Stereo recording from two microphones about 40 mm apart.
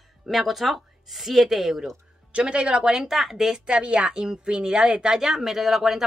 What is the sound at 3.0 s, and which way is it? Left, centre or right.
Speech, centre.